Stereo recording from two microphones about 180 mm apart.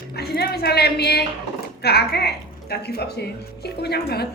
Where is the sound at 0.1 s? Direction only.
60° left (ahead or behind).